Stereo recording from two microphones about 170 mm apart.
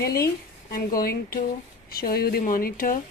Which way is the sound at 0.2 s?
65° left (ahead or behind).